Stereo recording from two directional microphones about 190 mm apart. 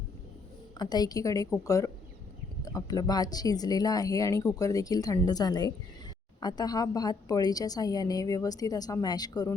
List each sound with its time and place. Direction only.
0.8 s a woman's voice: 20° left (ahead or behind)